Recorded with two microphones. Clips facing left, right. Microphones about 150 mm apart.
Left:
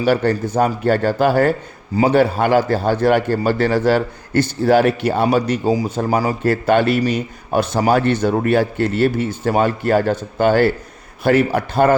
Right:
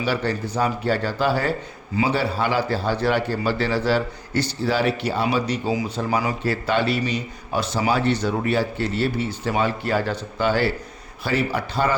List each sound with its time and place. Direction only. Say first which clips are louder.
0.0 s a man's voice: left 7 dB; 50° left (ahead or behind)